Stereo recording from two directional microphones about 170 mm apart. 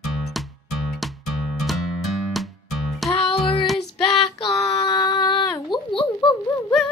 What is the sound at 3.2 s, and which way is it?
Music, 30° left (ahead or behind).